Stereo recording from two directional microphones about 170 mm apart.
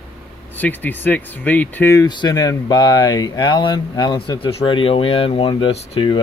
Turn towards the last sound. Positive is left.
turn(degrees=30)  # may be behind; listen again after turning